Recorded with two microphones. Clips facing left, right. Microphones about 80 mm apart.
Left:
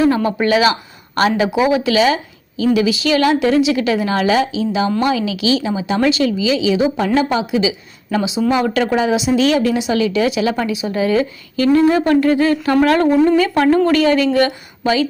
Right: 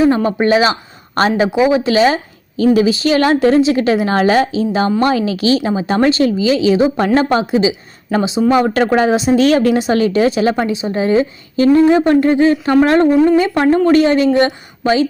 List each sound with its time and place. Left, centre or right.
0.1 s a woman's voice: right
8.1 s a woman's voice: right